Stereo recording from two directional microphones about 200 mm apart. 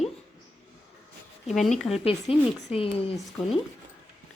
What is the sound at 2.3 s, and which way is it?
Speech, 30° left (ahead or behind).